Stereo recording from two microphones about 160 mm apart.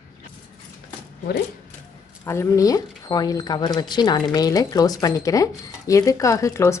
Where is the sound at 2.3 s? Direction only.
20° left (ahead or behind).